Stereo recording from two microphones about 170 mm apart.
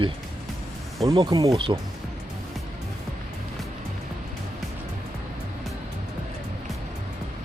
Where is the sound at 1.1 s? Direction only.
25° right (ahead or behind).